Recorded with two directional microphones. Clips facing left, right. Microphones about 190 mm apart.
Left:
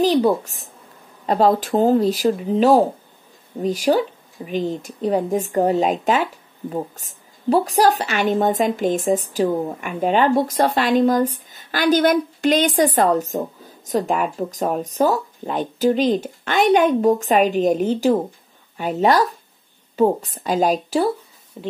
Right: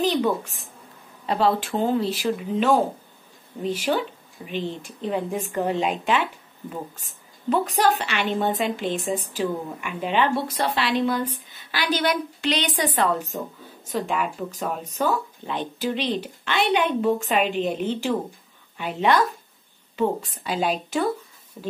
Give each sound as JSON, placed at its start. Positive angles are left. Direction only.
{"t": 0.0, "sound": "a woman's voice", "side_deg": 35}
{"t": 21.6, "sound": "a woman's voice", "side_deg": 25}